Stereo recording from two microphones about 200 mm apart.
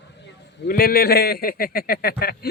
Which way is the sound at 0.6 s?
50° left (ahead or behind).